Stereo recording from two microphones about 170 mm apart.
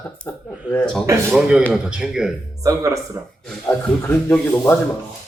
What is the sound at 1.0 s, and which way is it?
Speech, 15° right (ahead or behind).